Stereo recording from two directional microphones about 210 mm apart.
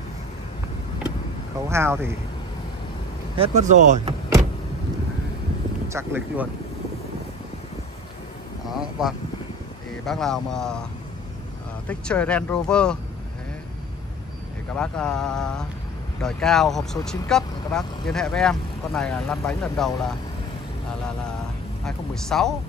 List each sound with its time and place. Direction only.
1.7 s speech: 10° right (ahead or behind)
3.3 s speech: 30° right (ahead or behind)
5.9 s speech: 10° right (ahead or behind)
8.6 s speech: centre (ahead or behind)
11.9 s speech: 5° left (ahead or behind)
14.8 s speech: 5° left (ahead or behind)
21.8 s speech: centre (ahead or behind)